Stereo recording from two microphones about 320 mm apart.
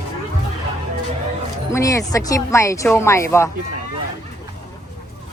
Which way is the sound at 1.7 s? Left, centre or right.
Centre.